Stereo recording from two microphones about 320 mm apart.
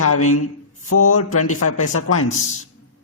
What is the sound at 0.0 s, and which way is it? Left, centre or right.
A man's voice, left.